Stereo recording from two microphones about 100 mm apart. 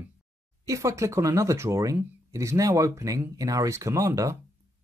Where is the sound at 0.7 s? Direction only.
30° right (ahead or behind).